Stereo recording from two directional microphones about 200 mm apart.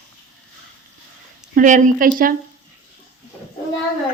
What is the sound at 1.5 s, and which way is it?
Speech, 40° right (ahead or behind).